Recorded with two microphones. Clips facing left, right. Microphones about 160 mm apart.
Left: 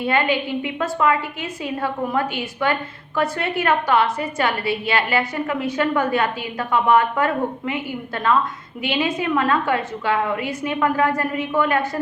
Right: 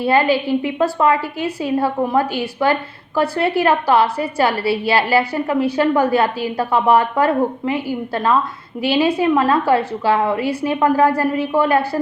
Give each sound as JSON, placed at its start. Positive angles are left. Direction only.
{"t": 0.0, "sound": "a woman's voice", "side_deg": -35}